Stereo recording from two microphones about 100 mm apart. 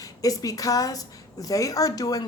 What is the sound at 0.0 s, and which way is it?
A woman's voice, 35° left (ahead or behind).